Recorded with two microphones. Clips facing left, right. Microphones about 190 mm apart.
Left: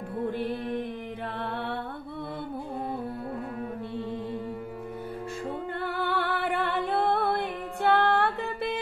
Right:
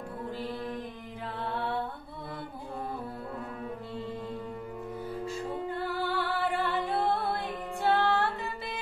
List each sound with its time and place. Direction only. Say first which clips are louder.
1.4 s music: right 1 dB; 60° left (ahead or behind)
5.7 s music: left 3 dB; 60° left (ahead or behind)